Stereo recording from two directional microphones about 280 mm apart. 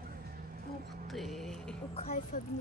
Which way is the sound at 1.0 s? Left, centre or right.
Centre.